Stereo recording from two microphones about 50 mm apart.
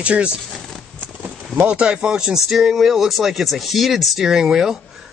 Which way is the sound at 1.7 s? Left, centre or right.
Centre.